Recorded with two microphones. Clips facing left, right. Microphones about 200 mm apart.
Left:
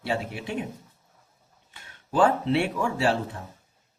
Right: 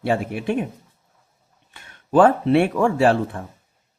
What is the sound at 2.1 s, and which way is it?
Speech, 55° right (ahead or behind).